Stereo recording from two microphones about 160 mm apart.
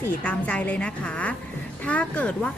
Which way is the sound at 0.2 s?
10° left (ahead or behind).